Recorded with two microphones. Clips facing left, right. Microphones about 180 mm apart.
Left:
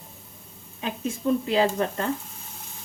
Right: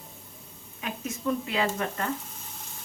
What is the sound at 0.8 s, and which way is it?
Speech, 30° left (ahead or behind).